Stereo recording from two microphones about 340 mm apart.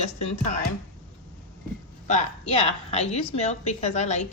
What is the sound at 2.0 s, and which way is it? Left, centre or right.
A woman's voice, left.